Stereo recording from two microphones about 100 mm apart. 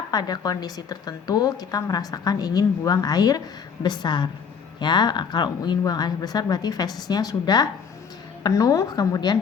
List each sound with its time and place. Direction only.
0.1 s a woman's voice: 40° left (ahead or behind)